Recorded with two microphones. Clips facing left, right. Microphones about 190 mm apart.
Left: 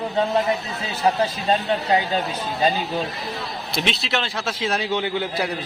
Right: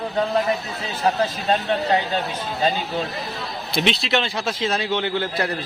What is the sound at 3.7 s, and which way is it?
A man's voice, centre (ahead or behind).